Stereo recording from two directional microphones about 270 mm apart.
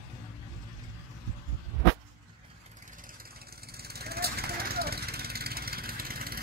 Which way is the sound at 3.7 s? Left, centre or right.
Right.